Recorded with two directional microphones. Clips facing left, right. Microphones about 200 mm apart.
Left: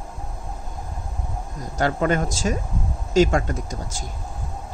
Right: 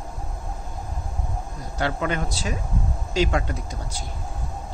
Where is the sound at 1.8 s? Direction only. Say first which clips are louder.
Left 4 dB; 45° left (ahead or behind).